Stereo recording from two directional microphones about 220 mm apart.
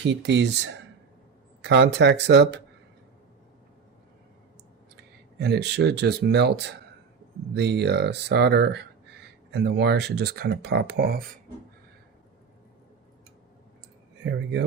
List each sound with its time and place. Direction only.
0.0 s speech: 50° right (ahead or behind)
4.9 s speech: 50° right (ahead or behind)